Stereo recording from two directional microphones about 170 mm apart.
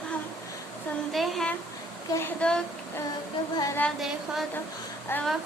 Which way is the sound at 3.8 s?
Centre (ahead or behind).